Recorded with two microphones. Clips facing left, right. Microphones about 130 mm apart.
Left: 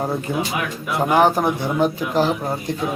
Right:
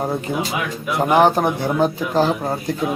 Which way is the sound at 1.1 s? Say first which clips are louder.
Right 1 dB; 25° right (ahead or behind).